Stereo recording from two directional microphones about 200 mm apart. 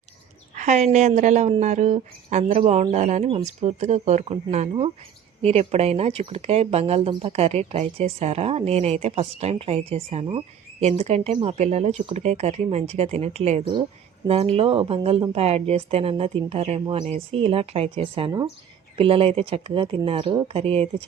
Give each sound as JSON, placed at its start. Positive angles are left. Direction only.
{"t": 0.5, "sound": "speech", "side_deg": -40}